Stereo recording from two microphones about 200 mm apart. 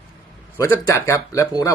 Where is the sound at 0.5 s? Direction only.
15° left (ahead or behind).